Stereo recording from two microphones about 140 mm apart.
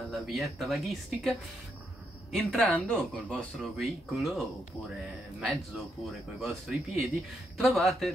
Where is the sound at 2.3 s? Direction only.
10° left (ahead or behind).